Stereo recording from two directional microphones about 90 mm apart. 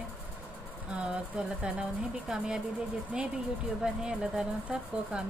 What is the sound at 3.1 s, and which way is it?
Speech, 10° right (ahead or behind).